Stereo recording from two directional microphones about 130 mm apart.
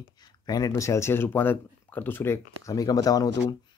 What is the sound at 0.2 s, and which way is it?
Speech, 30° left (ahead or behind).